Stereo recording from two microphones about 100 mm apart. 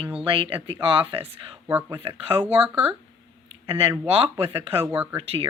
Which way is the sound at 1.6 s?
20° right (ahead or behind).